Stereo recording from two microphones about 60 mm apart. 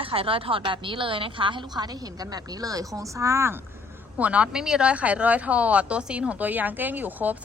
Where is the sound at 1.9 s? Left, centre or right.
Right.